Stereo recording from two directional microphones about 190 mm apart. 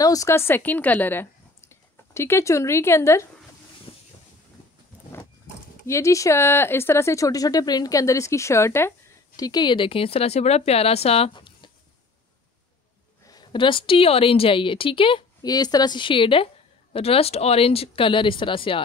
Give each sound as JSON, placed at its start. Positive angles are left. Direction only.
{"t": 0.0, "sound": "a woman's voice", "side_deg": 20}
{"t": 5.9, "sound": "speech", "side_deg": 15}
{"t": 13.3, "sound": "a woman's voice", "side_deg": 25}